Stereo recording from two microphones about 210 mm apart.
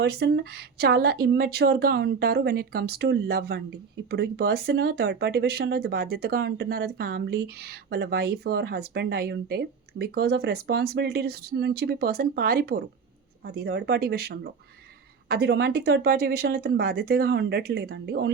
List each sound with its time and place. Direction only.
0.0 s speech: 50° right (ahead or behind)